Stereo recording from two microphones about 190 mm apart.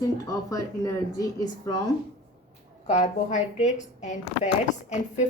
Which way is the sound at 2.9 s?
40° left (ahead or behind).